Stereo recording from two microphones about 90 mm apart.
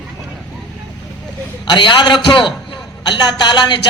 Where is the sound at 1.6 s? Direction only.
60° left (ahead or behind).